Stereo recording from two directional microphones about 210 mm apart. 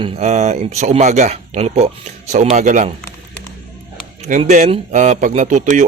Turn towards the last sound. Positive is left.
turn(degrees=-35)  # may be behind; listen again after turning